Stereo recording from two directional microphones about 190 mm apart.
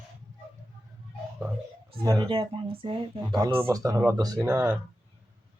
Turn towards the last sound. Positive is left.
turn(degrees=-15)  # may be behind; listen again after turning